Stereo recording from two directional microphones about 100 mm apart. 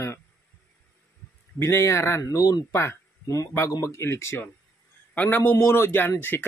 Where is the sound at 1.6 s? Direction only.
30° left (ahead or behind).